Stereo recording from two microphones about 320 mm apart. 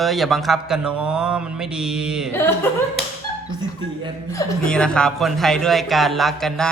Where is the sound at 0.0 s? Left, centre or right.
Centre.